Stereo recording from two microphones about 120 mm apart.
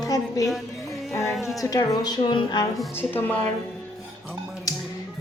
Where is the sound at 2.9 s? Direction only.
15° left (ahead or behind).